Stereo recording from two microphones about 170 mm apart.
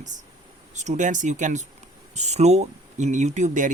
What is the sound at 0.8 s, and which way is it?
Speech, 45° right (ahead or behind).